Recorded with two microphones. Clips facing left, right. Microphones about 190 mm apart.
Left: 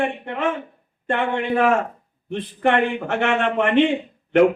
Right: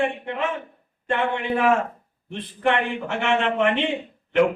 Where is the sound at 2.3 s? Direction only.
55° left (ahead or behind).